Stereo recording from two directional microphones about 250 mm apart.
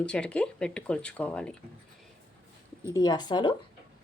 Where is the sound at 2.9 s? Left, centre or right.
Centre.